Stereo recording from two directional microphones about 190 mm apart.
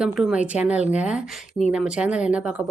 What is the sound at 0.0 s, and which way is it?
Speech, 5° right (ahead or behind).